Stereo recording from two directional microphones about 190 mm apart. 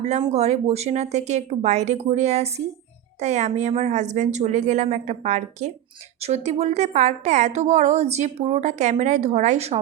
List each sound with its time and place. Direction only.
0.3 s a woman's voice: 35° right (ahead or behind)